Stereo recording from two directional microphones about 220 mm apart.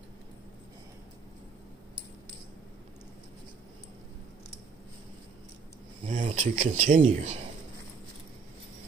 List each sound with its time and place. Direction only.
6.0 s speech: 30° right (ahead or behind)